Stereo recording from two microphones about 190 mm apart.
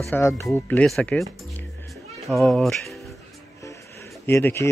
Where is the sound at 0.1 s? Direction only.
15° left (ahead or behind).